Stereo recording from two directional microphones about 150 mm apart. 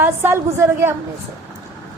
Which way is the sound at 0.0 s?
15° right (ahead or behind).